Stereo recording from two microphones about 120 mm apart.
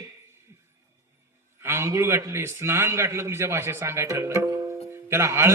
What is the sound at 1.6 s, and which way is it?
A man's voice, 20° right (ahead or behind).